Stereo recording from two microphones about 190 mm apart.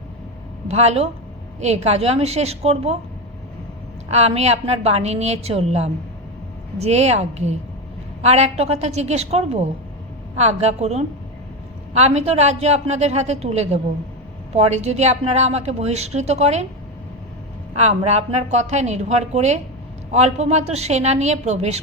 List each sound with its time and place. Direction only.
0.7 s a woman's voice: 35° right (ahead or behind)
4.1 s a woman's voice: 35° right (ahead or behind)
17.7 s a woman's voice: 35° right (ahead or behind)